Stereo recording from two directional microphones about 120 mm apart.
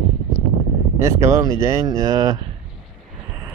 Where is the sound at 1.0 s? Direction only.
25° right (ahead or behind).